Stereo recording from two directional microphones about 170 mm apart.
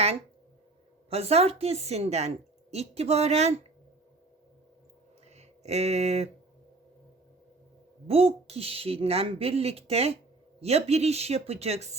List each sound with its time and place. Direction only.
1.1 s a woman's voice: 40° right (ahead or behind)
5.3 s speech: 40° right (ahead or behind)
8.0 s a woman's voice: 35° right (ahead or behind)